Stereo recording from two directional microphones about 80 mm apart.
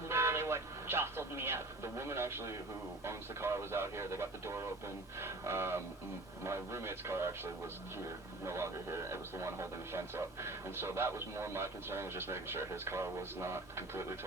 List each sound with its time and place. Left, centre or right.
0.1 s vehicle: right
3.1 s a man's voice: right